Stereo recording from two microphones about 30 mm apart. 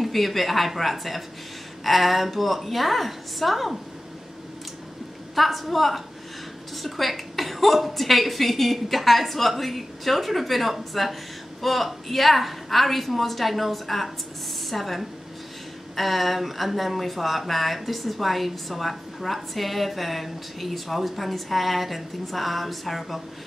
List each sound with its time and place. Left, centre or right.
0.0 s speech: centre
5.3 s speech: centre